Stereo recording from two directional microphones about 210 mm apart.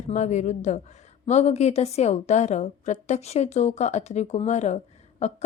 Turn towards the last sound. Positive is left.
turn(degrees=30)  # may be behind; listen again after turning